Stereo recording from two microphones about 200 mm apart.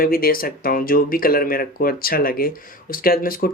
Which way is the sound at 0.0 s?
45° left (ahead or behind).